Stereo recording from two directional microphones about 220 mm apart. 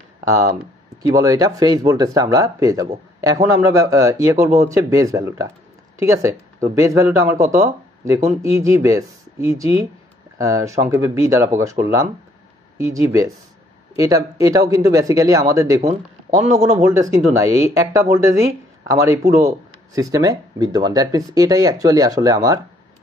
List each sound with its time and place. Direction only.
1.0 s speech: 15° right (ahead or behind)
16.8 s speech: 15° right (ahead or behind)